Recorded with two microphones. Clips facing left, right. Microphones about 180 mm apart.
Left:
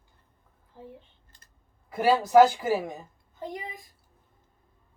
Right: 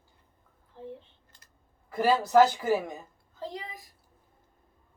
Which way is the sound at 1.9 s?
10° left (ahead or behind).